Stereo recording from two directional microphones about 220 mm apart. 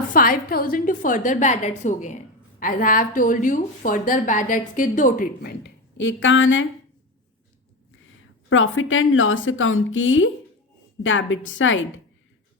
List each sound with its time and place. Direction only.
0.1 s a woman's voice: 40° left (ahead or behind); by 6.7 s 60° left (ahead or behind)
8.4 s a woman's voice: 65° left (ahead or behind)